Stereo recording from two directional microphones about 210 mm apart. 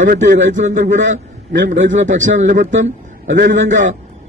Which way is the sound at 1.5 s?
60° right (ahead or behind).